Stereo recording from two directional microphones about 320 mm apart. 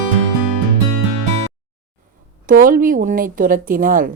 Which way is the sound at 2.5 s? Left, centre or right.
Right.